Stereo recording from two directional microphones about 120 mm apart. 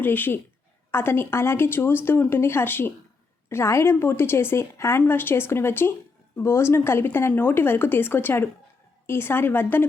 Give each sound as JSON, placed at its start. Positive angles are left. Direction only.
{"t": 0.0, "sound": "a woman's voice", "side_deg": 15}